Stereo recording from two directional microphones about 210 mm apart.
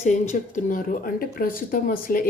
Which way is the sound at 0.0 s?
35° left (ahead or behind).